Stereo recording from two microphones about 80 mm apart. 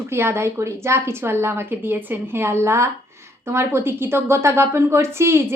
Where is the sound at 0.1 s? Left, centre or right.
Right.